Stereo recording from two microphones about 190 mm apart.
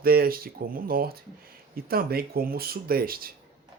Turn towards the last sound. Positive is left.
turn(degrees=-50)  # may be behind; listen again after turning